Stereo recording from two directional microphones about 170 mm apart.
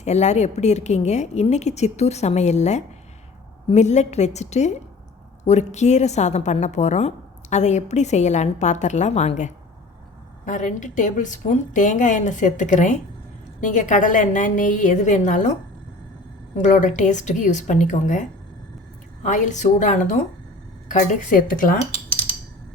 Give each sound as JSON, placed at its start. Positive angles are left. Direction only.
{"t": 0.0, "sound": "a woman's voice", "side_deg": 40}
{"t": 16.6, "sound": "a woman's voice", "side_deg": 45}